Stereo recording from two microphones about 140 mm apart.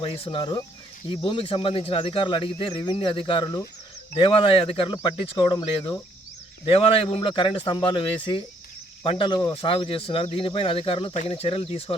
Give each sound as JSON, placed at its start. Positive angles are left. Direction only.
{"t": 0.0, "sound": "speech", "side_deg": 45}
{"t": 6.7, "sound": "speech", "side_deg": 45}